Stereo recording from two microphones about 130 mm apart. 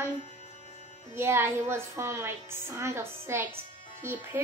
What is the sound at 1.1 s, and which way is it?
A woman's voice, 20° right (ahead or behind).